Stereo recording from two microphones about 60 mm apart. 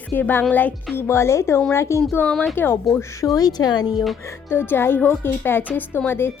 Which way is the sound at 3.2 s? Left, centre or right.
Left.